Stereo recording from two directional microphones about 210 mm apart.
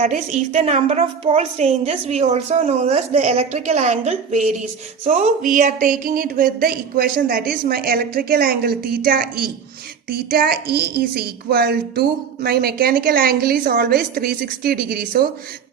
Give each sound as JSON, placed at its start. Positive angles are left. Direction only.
{"t": 0.0, "sound": "a woman's voice", "side_deg": -35}